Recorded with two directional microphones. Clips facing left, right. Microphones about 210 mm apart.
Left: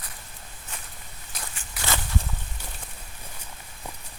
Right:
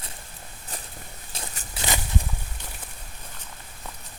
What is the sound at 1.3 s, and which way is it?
Walk, 25° right (ahead or behind).